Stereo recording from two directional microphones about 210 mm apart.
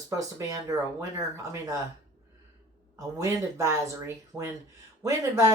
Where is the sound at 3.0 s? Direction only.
15° right (ahead or behind).